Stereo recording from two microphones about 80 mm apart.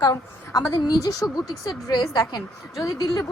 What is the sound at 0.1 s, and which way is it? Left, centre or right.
A woman's voice, left.